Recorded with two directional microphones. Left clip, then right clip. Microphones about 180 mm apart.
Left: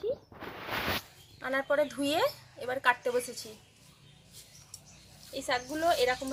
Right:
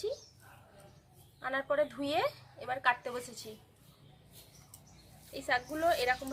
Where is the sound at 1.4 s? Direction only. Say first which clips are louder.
Left 3 dB; 35° left (ahead or behind).